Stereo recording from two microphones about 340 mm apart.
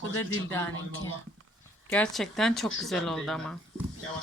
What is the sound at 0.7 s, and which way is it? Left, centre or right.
Speech, left.